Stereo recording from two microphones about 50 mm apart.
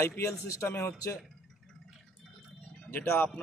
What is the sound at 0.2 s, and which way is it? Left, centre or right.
Speech, left.